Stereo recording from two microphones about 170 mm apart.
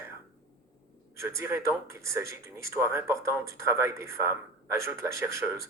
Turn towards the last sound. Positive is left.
turn(degrees=-15)  # may be behind; listen again after turning